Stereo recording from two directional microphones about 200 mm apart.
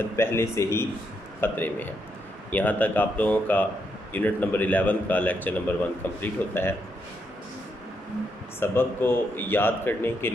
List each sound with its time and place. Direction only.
0.0 s speech: 10° left (ahead or behind)
8.5 s speech: 10° left (ahead or behind)